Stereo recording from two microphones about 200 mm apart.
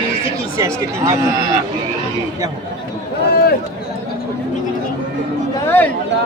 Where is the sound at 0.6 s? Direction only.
15° right (ahead or behind).